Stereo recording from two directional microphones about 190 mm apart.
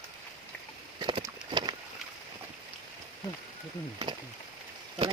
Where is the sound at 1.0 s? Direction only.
25° right (ahead or behind).